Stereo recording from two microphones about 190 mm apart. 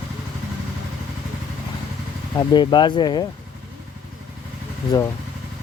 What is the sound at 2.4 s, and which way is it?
Speech, 20° left (ahead or behind).